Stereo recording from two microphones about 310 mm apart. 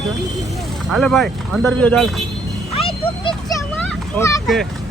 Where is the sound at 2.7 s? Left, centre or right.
Centre.